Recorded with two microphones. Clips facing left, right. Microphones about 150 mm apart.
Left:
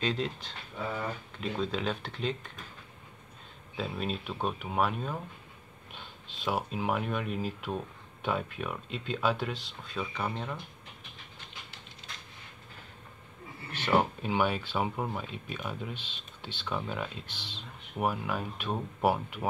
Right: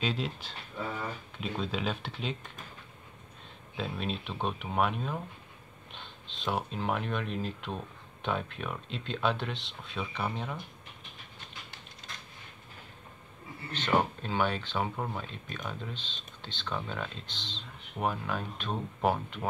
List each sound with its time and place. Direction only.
0.0 s speech: 5° right (ahead or behind)
3.7 s speech: centre (ahead or behind)
13.7 s speech: 10° left (ahead or behind)